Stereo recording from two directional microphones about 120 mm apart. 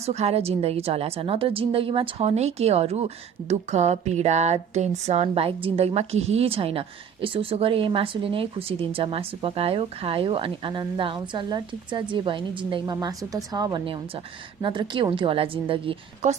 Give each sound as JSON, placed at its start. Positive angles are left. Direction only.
{"t": 0.0, "sound": "a woman's voice", "side_deg": -65}
{"t": 3.5, "sound": "speech", "side_deg": -70}
{"t": 12.8, "sound": "speech", "side_deg": -30}
{"t": 16.2, "sound": "a woman's voice", "side_deg": -80}